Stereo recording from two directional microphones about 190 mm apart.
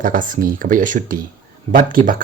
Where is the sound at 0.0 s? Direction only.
45° right (ahead or behind).